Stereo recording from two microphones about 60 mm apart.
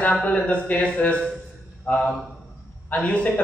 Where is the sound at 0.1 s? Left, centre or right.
Centre.